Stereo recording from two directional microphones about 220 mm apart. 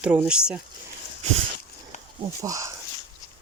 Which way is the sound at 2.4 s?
15° right (ahead or behind).